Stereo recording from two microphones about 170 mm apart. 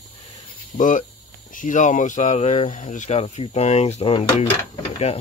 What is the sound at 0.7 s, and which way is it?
Speech, 50° left (ahead or behind).